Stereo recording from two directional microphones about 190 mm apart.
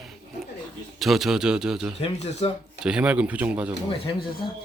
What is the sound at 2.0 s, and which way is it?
Speech, 35° left (ahead or behind).